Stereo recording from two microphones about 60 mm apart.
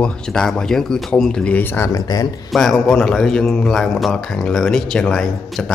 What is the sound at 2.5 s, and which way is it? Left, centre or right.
Speech, centre.